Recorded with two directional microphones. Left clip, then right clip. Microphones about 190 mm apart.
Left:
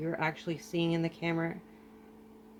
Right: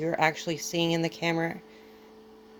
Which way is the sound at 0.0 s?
35° right (ahead or behind).